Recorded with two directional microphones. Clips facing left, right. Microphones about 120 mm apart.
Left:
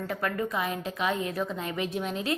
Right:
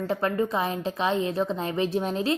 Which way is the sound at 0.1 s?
30° right (ahead or behind).